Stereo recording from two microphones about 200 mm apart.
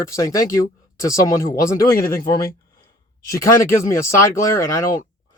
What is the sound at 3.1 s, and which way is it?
Speech, 15° left (ahead or behind).